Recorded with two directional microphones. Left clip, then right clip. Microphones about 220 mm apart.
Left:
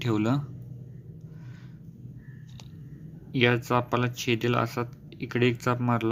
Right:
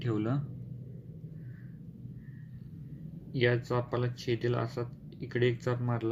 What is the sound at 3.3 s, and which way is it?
Speech, 25° left (ahead or behind).